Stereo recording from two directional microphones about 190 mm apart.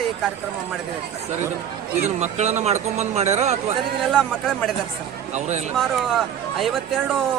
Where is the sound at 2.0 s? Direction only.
35° right (ahead or behind).